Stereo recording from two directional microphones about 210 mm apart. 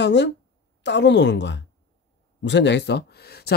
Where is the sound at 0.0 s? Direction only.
55° left (ahead or behind).